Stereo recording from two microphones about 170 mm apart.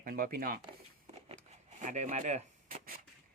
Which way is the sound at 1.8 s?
45° right (ahead or behind).